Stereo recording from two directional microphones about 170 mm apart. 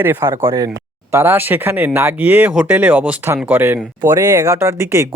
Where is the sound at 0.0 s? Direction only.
15° right (ahead or behind).